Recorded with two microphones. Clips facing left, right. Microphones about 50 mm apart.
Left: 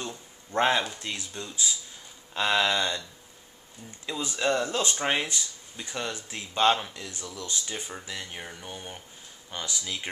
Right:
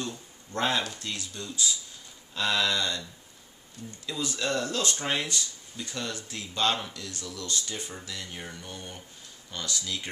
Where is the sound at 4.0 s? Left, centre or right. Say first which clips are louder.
Left 3 dB; left.